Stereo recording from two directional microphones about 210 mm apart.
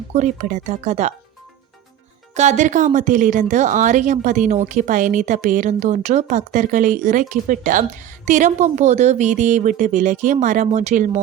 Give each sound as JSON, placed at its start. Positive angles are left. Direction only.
{"t": 0.1, "sound": "speech", "side_deg": -35}
{"t": 2.3, "sound": "speech", "side_deg": -35}